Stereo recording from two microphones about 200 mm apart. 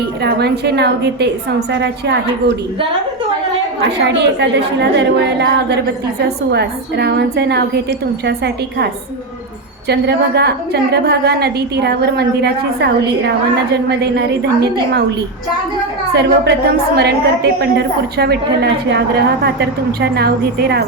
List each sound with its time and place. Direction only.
0.2 s a woman's voice: 55° right (ahead or behind)
3.8 s a woman's voice: 60° right (ahead or behind)
16.1 s a woman's voice: 55° right (ahead or behind)